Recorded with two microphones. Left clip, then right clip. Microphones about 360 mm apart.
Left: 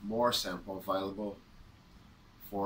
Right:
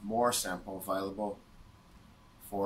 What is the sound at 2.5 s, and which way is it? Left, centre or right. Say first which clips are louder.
Speech: right 1 dB; centre.